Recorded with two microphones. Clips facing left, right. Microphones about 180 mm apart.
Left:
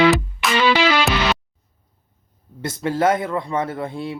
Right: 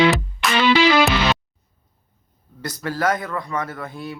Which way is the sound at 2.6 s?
25° left (ahead or behind).